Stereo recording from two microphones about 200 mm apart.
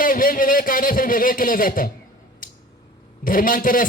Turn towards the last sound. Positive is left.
turn(degrees=45)  # may be behind; listen again after turning